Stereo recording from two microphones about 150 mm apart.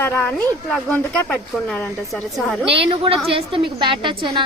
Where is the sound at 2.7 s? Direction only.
40° right (ahead or behind).